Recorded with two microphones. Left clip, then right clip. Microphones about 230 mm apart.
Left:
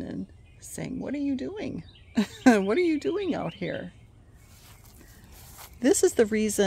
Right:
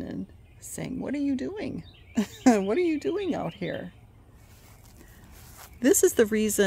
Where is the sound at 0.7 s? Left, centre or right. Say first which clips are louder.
Right 1 dB; centre.